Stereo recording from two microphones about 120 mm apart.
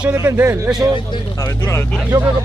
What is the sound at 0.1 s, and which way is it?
Speech, 20° right (ahead or behind).